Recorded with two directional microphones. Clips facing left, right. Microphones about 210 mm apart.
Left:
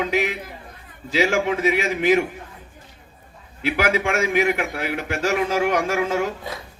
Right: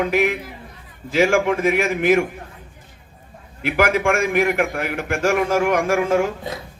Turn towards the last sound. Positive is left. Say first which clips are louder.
# right 4 dB
turn(degrees=-50)  # may be behind; listen again after turning